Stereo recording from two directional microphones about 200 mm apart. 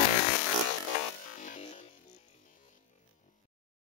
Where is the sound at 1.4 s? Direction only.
35° left (ahead or behind).